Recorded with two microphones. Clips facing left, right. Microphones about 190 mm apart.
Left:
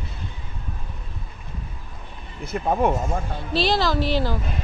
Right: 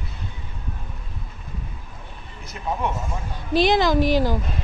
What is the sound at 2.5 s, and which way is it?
Speech, 50° left (ahead or behind).